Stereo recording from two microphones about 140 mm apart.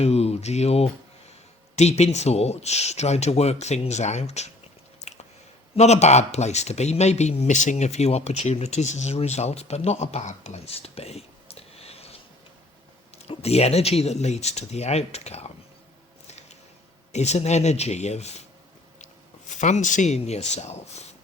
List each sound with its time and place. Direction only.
0.0 s speech: 50° left (ahead or behind)
5.1 s a sound: 50° left (ahead or behind)
5.7 s speech: 50° left (ahead or behind)
13.2 s speech: 50° left (ahead or behind)
16.2 s a sound: 50° left (ahead or behind)
17.1 s speech: 55° left (ahead or behind)
19.5 s speech: 60° left (ahead or behind)